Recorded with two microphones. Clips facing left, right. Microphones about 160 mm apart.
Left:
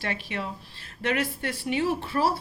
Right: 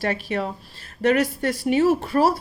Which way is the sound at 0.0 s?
40° right (ahead or behind).